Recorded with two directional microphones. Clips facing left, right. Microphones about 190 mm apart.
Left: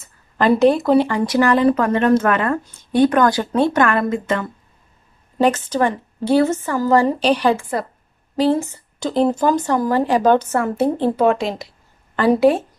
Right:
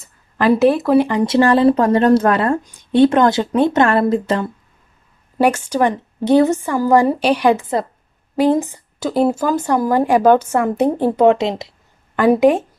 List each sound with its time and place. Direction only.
0.4 s speech: centre (ahead or behind)
0.9 s speech: 20° right (ahead or behind); by 2.6 s 35° right (ahead or behind)
2.6 s speech: 15° right (ahead or behind); by 4.5 s 30° right (ahead or behind)
5.4 s speech: 10° right (ahead or behind)
12.2 s speech: 15° right (ahead or behind)